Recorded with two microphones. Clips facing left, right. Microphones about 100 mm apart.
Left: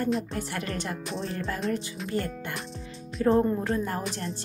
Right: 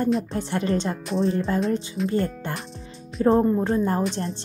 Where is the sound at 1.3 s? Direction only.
25° right (ahead or behind).